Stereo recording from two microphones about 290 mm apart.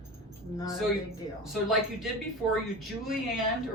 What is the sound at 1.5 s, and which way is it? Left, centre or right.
Speech, centre.